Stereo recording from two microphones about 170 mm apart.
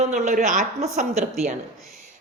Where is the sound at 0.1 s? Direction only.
45° right (ahead or behind).